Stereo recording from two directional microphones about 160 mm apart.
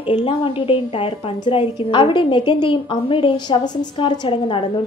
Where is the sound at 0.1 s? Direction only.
35° left (ahead or behind).